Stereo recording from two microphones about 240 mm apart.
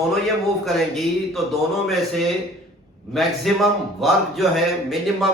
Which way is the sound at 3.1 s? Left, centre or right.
Centre.